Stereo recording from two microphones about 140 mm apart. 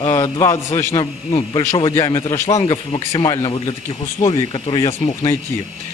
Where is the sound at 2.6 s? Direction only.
40° left (ahead or behind).